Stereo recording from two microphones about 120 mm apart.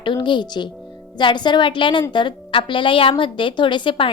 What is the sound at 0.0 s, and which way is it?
A woman's voice, 40° left (ahead or behind).